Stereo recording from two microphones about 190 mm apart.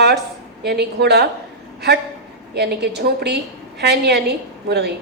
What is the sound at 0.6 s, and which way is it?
Speech, 60° right (ahead or behind).